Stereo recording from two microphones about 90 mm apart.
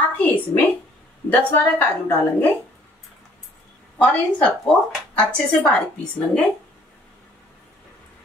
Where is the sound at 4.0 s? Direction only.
10° left (ahead or behind).